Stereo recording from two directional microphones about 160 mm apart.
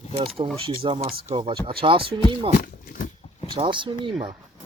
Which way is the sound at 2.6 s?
60° left (ahead or behind).